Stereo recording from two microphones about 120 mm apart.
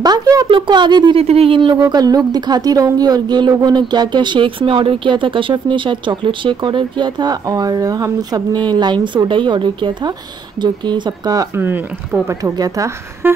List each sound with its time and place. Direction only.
0.0 s speech: 35° right (ahead or behind)
1.1 s speech: 55° right (ahead or behind)
1.8 s speech: 35° right (ahead or behind)
11.5 s speech: 20° right (ahead or behind)
13.2 s speech: 15° right (ahead or behind)